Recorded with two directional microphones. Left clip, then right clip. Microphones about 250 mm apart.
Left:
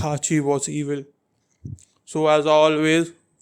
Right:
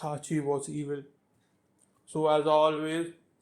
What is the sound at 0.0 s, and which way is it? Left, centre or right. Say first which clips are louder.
Speech: left 10 dB; left.